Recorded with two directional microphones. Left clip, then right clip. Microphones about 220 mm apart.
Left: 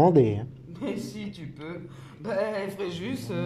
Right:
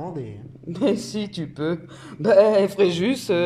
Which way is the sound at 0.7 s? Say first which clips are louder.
Right 12 dB; 45° right (ahead or behind).